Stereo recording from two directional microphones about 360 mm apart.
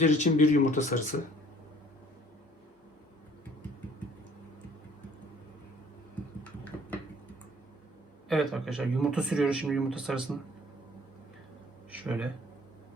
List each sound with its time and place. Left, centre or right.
0.0 s speech: centre
8.3 s speech: centre
11.9 s a sound: centre